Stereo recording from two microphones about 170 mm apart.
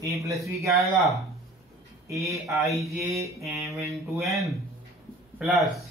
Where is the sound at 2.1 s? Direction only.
20° right (ahead or behind).